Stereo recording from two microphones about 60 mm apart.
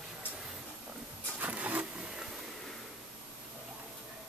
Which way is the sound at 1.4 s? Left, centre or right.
Right.